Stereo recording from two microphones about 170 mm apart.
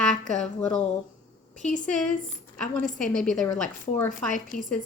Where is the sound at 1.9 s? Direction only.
Centre (ahead or behind).